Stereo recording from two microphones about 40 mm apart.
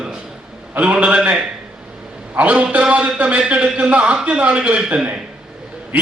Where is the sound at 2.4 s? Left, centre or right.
Right.